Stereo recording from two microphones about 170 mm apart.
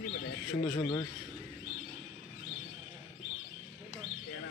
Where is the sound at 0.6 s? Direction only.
20° left (ahead or behind).